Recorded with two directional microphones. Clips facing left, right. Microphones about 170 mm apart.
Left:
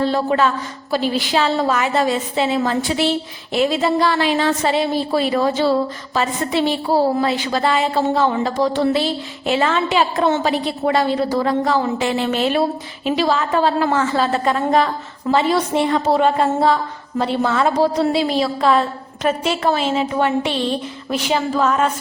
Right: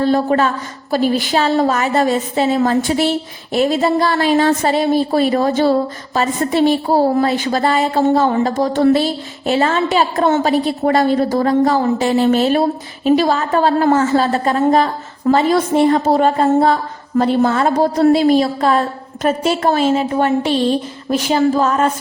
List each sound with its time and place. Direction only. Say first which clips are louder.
0.0 s a woman's voice: right 3 dB; 45° right (ahead or behind)